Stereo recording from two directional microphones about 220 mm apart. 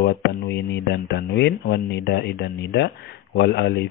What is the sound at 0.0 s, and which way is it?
Speech, 50° left (ahead or behind).